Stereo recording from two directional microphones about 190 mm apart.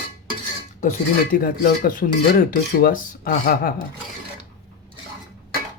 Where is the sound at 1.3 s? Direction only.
50° left (ahead or behind).